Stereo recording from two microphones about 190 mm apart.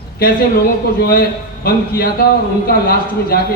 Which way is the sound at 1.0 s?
55° left (ahead or behind).